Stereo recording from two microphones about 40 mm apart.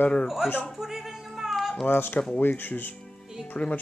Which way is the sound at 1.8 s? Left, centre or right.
Left.